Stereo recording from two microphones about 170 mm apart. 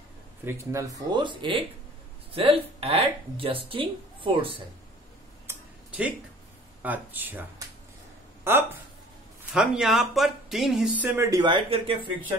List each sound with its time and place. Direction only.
0.5 s speech: 15° right (ahead or behind)
5.5 s a sound: 10° right (ahead or behind)
6.8 s speech: 10° right (ahead or behind)
9.5 s speech: centre (ahead or behind)
11.1 s speech: 20° right (ahead or behind)